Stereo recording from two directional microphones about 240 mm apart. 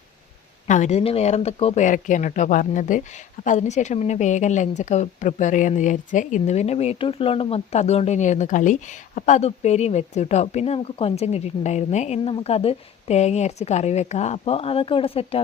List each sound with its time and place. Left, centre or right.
0.7 s speech: left